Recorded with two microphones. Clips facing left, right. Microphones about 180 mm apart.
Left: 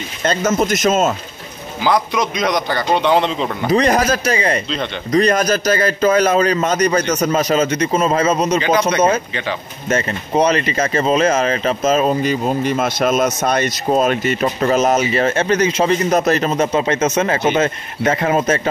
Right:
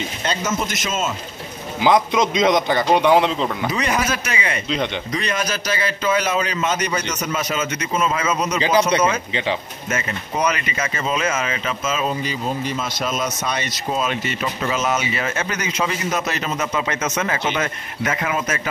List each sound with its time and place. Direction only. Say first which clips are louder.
0.2 s speech: left 8 dB; 45° left (ahead or behind)
1.8 s a man's voice: right 1 dB; 20° right (ahead or behind)
2.9 s speech: even; 10° right (ahead or behind)
3.7 s speech: left 7 dB; 35° left (ahead or behind)
9.8 s speech: left 7 dB; 30° left (ahead or behind)
16.5 s speech: left 7 dB; 30° left (ahead or behind)
17.3 s speech: left 7 dB; 45° left (ahead or behind)
17.6 s speech: left 7 dB; 30° left (ahead or behind)